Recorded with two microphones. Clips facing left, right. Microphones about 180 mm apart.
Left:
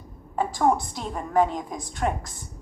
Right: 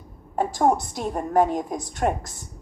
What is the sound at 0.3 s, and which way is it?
A woman's voice, 45° right (ahead or behind).